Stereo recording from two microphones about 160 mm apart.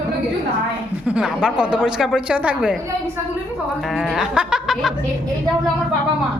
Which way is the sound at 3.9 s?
Centre (ahead or behind).